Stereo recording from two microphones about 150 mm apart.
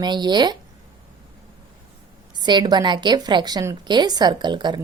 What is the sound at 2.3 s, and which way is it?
A woman's voice, 30° right (ahead or behind).